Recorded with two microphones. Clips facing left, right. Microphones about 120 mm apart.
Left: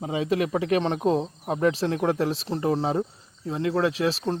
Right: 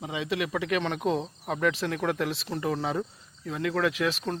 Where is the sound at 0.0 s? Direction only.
40° left (ahead or behind).